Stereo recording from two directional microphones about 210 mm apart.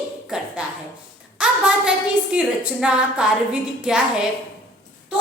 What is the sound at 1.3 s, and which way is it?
A woman's voice, 5° right (ahead or behind).